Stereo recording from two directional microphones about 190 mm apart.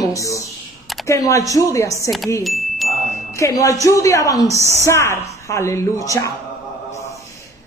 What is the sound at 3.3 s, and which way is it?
A woman's voice, 15° left (ahead or behind).